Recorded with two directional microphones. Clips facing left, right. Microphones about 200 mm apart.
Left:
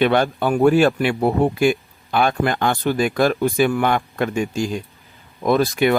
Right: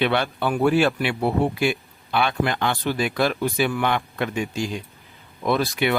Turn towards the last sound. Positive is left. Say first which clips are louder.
# left 5 dB
turn(degrees=45)  # may be behind; listen again after turning